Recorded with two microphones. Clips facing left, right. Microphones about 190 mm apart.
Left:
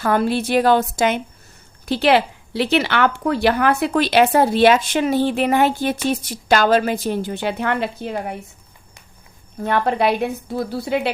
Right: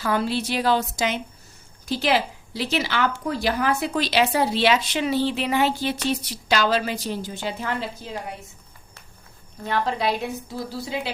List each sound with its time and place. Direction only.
0.0 s a woman's voice: 55° left (ahead or behind)
9.6 s speech: 60° left (ahead or behind)